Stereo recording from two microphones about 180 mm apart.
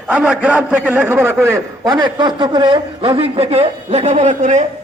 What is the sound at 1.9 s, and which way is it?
A man's voice, 25° right (ahead or behind).